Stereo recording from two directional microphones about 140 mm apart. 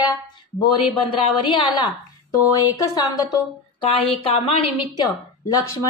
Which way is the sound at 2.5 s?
25° left (ahead or behind).